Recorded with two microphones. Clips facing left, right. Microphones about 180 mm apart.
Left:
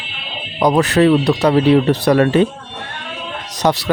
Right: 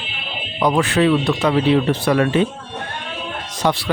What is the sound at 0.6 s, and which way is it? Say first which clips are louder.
Speech: left 4 dB; 40° left (ahead or behind).